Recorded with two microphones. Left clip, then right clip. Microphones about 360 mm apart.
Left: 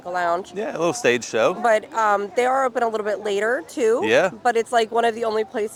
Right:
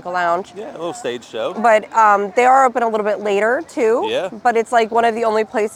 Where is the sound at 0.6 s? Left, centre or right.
Left.